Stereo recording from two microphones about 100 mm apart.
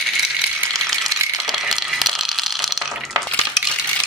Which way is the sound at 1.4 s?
Centre (ahead or behind).